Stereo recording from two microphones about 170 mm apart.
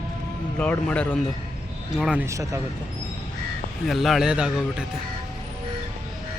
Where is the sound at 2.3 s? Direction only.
15° right (ahead or behind).